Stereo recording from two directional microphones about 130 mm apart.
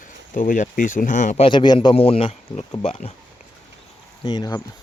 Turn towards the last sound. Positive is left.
turn(degrees=35)  # may be behind; listen again after turning